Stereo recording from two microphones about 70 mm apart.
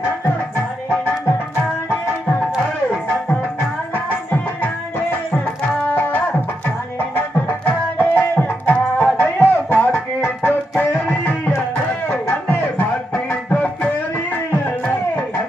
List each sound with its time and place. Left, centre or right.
3.9 s tabla: left
5.8 s music: left
7.4 s music: left
12.0 s music: left